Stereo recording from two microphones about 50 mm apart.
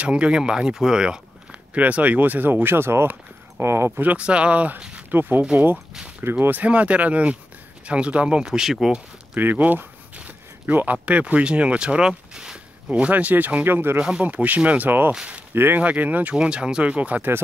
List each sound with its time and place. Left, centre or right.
0.0 s speech: right
1.5 s speech: right
3.9 s speech: right
5.1 s speech: right
5.4 s speech: right
8.5 s speech: centre
9.3 s speech: right; by 12.5 s centre
13.1 s speech: right
13.7 s speech: right
14.2 s speech: right
14.9 s speech: right
15.8 s speech: right
16.3 s speech: centre